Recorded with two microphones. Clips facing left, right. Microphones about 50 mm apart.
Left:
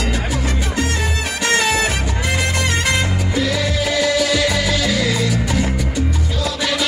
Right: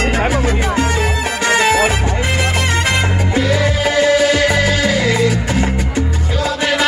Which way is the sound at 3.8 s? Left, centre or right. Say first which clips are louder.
Right 5 dB; right.